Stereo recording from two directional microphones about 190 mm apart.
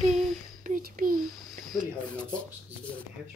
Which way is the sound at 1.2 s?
Centre (ahead or behind).